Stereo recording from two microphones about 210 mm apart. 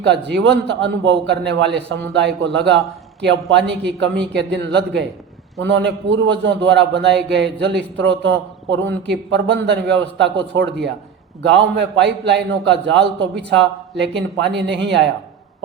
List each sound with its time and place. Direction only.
0.0 s a man's voice: 55° right (ahead or behind)